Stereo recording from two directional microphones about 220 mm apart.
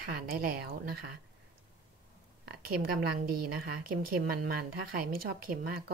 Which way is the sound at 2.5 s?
45° right (ahead or behind).